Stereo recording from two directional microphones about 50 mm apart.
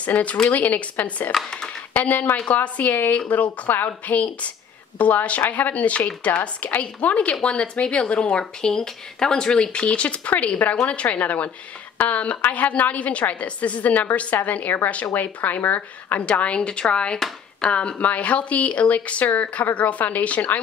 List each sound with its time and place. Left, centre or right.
0.0 s speech: left